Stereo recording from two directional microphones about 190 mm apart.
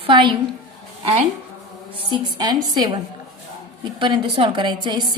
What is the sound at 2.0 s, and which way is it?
A woman's voice, 25° right (ahead or behind).